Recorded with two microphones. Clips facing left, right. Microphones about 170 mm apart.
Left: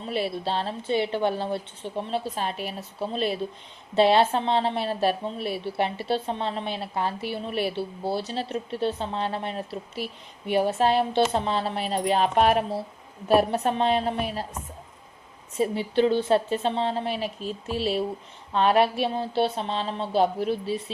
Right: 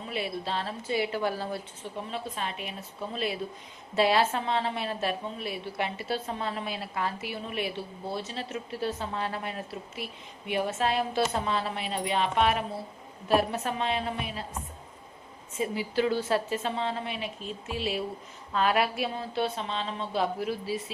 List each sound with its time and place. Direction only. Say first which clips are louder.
0.1 s a woman's voice: left 5 dB; 35° left (ahead or behind)
15.5 s a woman's voice: left 5 dB; 30° left (ahead or behind)
17.2 s speech: left 5 dB; centre (ahead or behind)
17.7 s a woman's voice: left 5 dB; 35° left (ahead or behind)